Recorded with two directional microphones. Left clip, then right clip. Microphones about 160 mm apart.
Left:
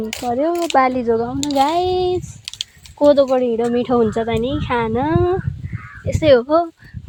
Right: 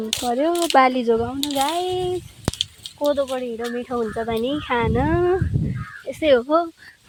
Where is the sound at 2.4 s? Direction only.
90° left.